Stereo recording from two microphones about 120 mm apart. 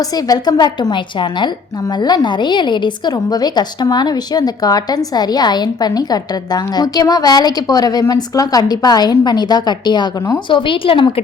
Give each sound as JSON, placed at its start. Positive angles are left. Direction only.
{"t": 0.0, "sound": "a woman's voice", "side_deg": 30}